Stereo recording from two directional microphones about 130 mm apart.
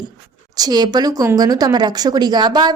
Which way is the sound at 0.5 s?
30° right (ahead or behind).